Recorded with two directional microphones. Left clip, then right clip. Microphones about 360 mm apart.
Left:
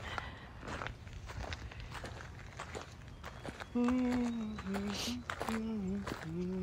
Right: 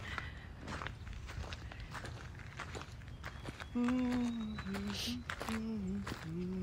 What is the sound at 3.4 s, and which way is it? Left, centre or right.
Run, left.